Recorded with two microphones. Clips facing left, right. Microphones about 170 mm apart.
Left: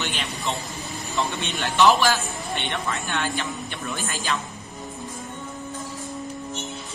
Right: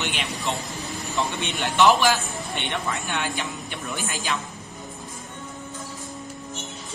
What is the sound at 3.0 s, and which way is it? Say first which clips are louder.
A man's voice: left 1 dB; 15° right (ahead or behind).